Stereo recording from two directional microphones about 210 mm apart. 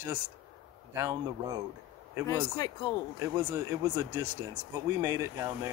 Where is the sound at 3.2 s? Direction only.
15° right (ahead or behind).